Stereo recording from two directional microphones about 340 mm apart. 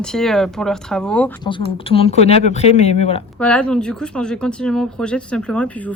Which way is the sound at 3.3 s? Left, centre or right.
Centre.